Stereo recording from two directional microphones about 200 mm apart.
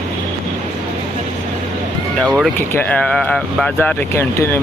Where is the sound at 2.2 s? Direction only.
Centre (ahead or behind).